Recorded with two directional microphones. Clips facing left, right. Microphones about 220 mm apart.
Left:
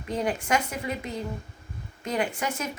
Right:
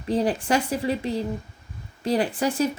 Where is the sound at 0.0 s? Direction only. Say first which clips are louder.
Right 5 dB; 30° right (ahead or behind).